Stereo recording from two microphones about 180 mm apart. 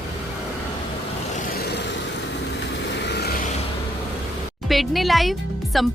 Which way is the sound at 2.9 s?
70° left (ahead or behind).